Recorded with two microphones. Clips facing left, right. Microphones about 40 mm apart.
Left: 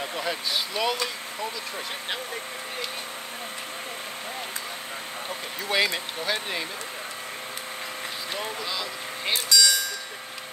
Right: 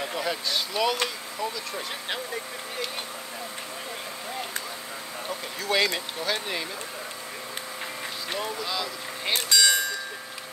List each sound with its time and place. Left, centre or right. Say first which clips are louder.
0.2 s speech: left 1 dB; centre
5.6 s speech: even; centre
8.6 s speech: even; centre
9.5 s a sound: even; right